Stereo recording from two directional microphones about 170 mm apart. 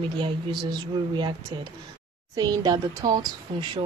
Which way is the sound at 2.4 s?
20° right (ahead or behind).